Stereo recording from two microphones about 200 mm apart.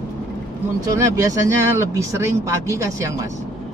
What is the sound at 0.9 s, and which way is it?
Speech, 15° right (ahead or behind).